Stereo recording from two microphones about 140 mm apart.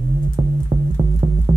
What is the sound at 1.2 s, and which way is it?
Music, 40° right (ahead or behind).